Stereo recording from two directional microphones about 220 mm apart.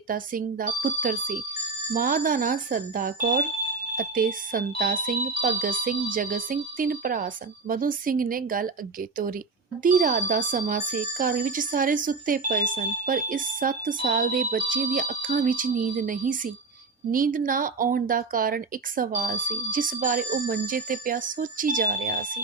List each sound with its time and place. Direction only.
0.1 s speech: 40° right (ahead or behind)
9.8 s speech: 40° right (ahead or behind)